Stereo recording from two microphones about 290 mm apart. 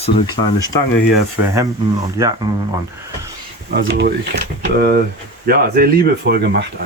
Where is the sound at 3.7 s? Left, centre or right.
Right.